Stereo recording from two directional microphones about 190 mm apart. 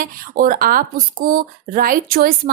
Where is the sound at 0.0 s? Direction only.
45° right (ahead or behind).